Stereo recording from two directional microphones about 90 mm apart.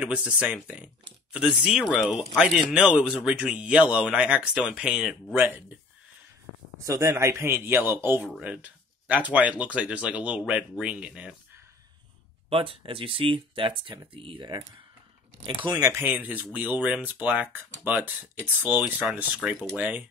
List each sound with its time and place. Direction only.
0.0 s speech: 15° right (ahead or behind)
5.3 s speech: 20° right (ahead or behind)
6.8 s speech: 35° right (ahead or behind); by 11.3 s 10° right (ahead or behind)
12.4 s speech: 90° right; by 15.8 s 60° right (ahead or behind)
16.0 s speech: 20° right (ahead or behind)